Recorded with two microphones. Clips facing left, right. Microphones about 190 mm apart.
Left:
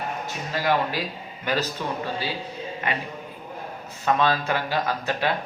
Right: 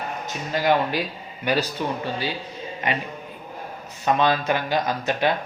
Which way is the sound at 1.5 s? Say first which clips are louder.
Right 3 dB; 15° right (ahead or behind).